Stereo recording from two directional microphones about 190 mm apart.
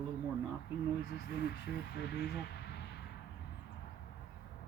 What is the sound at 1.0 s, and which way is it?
Speech, 60° left (ahead or behind).